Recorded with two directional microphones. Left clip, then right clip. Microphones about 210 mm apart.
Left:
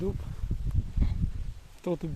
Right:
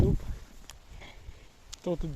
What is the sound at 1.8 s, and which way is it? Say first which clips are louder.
Speech: left 1 dB; 20° left (ahead or behind).